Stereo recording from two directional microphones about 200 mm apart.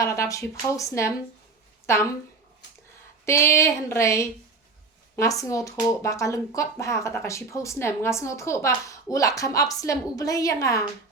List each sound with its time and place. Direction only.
0.0 s speech: 15° left (ahead or behind)
3.2 s speech: 15° left (ahead or behind)